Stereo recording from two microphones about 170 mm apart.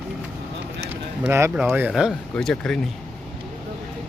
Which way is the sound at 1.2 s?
15° right (ahead or behind).